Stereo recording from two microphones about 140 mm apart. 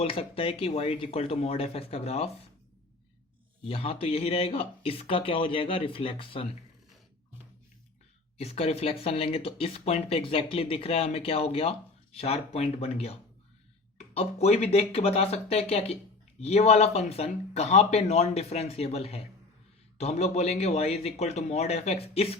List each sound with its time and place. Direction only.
0.0 s speech: 40° left (ahead or behind)
3.6 s speech: 45° left (ahead or behind)
8.4 s speech: 45° left (ahead or behind)